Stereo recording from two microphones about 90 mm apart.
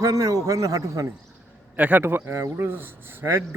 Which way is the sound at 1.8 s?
20° right (ahead or behind).